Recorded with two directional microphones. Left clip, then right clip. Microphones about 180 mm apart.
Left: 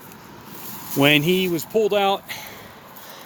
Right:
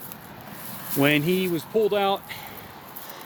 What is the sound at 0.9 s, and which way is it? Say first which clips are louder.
Speech: left 5 dB; 45° left (ahead or behind).